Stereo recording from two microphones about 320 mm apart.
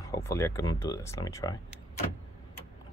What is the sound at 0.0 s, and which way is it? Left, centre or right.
Speech, centre.